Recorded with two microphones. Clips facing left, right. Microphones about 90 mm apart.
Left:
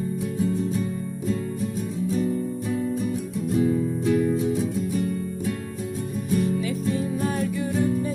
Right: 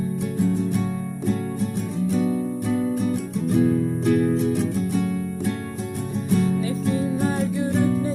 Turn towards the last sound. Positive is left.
turn(degrees=-75)  # may be behind; listen again after turning